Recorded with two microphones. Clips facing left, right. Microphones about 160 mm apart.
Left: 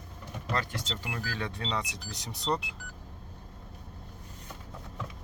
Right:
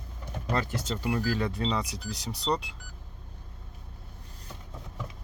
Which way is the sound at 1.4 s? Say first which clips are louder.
Right 5 dB; 5° right (ahead or behind).